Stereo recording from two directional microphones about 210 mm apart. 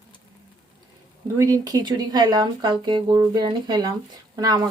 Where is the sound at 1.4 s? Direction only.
15° right (ahead or behind).